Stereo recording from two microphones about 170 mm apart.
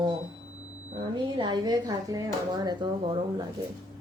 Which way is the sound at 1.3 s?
25° right (ahead or behind).